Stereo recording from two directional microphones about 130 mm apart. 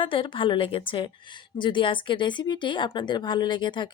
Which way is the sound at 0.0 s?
40° left (ahead or behind).